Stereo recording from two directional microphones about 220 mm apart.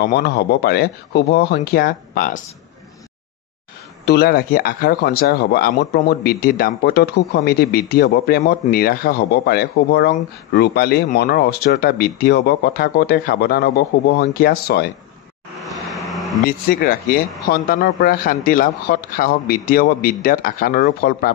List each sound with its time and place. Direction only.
0.0 s speech: 50° left (ahead or behind)
4.0 s speech: 45° left (ahead or behind)
15.6 s vehicle: centre (ahead or behind)
16.1 s a sound: centre (ahead or behind)
16.4 s a man's voice: 40° left (ahead or behind)